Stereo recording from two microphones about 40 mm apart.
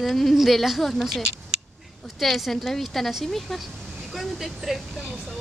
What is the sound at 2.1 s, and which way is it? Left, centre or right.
Speech, centre.